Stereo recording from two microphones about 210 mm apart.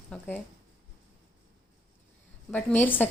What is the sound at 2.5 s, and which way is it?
Speech, 10° left (ahead or behind).